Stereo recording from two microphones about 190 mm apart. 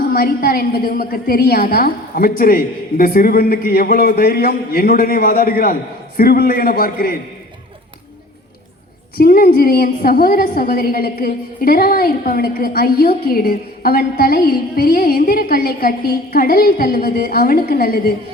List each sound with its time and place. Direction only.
0.0 s a woman's voice: 50° left (ahead or behind)
9.1 s a woman's voice: 50° left (ahead or behind)